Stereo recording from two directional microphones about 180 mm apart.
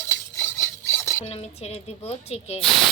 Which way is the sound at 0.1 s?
15° left (ahead or behind).